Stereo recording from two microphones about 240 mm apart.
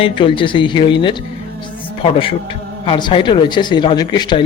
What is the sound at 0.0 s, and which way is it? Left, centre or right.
A man's voice, left.